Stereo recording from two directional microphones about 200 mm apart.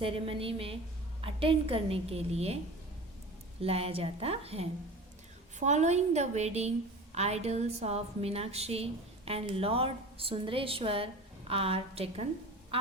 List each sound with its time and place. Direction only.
0.0 s a woman's voice: 25° right (ahead or behind)
3.6 s a woman's voice: 30° right (ahead or behind)
12.7 s quack: 30° right (ahead or behind)